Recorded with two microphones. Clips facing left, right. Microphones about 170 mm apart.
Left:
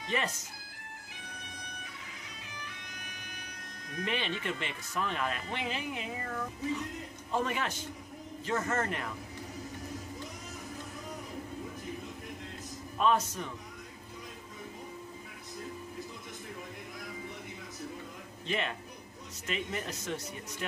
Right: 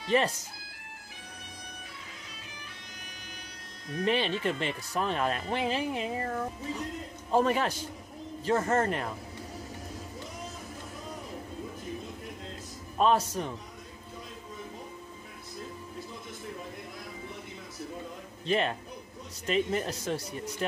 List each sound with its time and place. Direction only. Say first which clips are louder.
0.0 s speech: right 7 dB; 35° right (ahead or behind)
3.9 s speech: right 7 dB; 35° right (ahead or behind)
12.9 s speech: right 3 dB; 35° right (ahead or behind)
18.5 s speech: right 6 dB; 35° right (ahead or behind)